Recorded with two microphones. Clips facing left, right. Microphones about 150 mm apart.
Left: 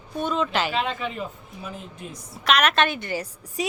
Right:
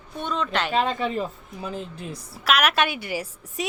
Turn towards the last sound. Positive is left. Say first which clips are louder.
# left 1 dB
turn(degrees=-10)  # may be behind; listen again after turning